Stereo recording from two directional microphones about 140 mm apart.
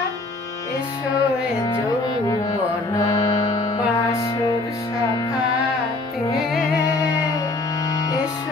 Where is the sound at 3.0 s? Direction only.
30° left (ahead or behind).